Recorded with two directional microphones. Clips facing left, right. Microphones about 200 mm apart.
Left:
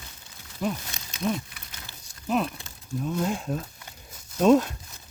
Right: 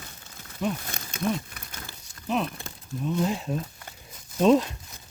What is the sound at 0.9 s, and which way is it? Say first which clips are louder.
Crumpling: even; 50° right (ahead or behind).